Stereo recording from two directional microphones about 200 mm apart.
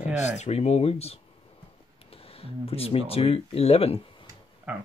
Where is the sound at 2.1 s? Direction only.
30° left (ahead or behind).